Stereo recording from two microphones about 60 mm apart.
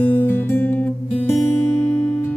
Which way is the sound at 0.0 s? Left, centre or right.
Left.